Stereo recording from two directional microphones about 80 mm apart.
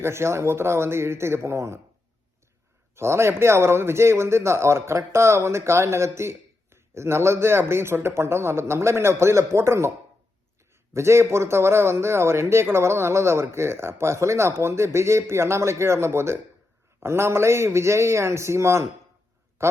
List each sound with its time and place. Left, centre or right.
0.0 s a man's voice: right
2.9 s a man's voice: right
10.9 s a man's voice: right